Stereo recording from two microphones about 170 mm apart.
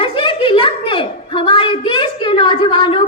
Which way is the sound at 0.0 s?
30° left (ahead or behind).